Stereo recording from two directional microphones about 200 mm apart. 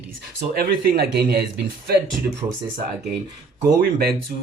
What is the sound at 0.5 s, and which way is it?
Speech, 50° right (ahead or behind).